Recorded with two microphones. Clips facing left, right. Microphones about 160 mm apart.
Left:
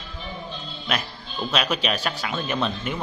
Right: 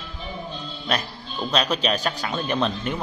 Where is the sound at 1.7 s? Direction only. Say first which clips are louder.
Right 2 dB; 40° right (ahead or behind).